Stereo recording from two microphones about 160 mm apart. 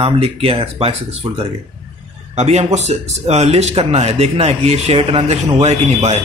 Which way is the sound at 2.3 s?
40° right (ahead or behind).